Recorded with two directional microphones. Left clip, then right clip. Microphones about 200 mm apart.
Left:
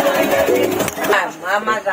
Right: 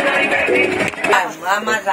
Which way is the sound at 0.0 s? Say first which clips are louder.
Left 1 dB; centre (ahead or behind).